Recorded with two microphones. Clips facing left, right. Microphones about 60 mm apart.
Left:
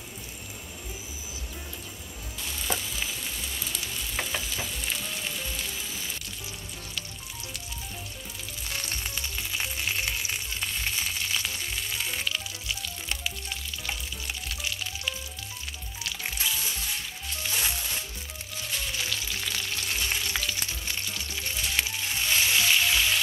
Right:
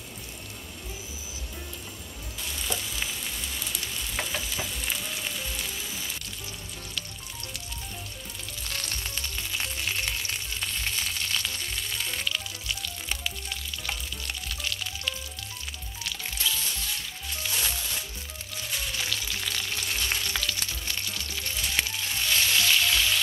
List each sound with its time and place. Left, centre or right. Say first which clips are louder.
3.7 s frying: even; centre
8.6 s frying: left 1 dB; centre
16.0 s music: even; centre
18.9 s frying: even; centre
21.3 s music: even; centre